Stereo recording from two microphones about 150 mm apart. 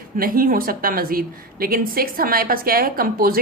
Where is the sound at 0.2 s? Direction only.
75° right (ahead or behind).